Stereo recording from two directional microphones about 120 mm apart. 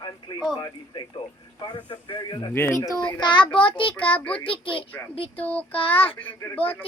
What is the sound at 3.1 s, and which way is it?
A child's voice, 40° left (ahead or behind).